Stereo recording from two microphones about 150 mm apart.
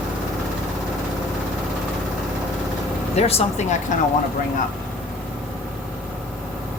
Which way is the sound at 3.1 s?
45° left (ahead or behind).